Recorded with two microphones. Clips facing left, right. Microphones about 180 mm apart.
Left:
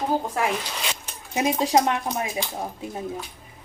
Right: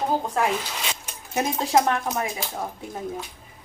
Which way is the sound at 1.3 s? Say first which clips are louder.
Left 1 dB; 15° left (ahead or behind).